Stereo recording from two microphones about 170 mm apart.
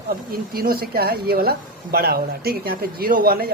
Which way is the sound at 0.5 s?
60° right (ahead or behind).